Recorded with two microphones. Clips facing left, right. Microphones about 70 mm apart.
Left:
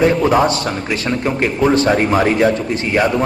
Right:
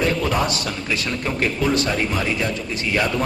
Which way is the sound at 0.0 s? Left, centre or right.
Left.